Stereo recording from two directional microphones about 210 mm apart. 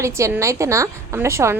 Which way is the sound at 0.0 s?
15° right (ahead or behind).